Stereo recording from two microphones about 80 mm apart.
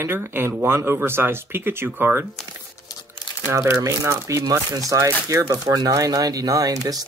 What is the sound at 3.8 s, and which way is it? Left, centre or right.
Speech, right.